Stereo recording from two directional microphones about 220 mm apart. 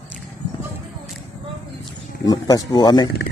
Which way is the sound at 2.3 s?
15° left (ahead or behind).